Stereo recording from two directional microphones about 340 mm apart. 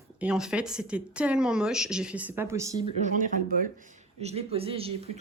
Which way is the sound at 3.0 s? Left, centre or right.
Right.